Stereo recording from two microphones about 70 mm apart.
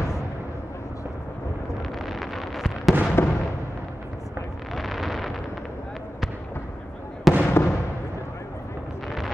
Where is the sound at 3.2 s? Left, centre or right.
Left.